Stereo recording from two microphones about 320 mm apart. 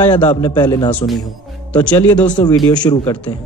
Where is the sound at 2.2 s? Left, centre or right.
Centre.